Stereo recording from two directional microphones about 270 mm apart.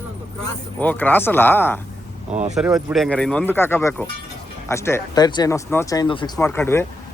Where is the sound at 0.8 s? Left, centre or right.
Centre.